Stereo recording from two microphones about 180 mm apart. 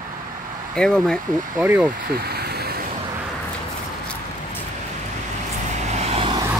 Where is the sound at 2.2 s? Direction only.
60° right (ahead or behind).